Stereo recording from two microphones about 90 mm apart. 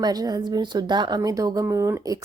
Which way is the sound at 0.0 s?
45° right (ahead or behind).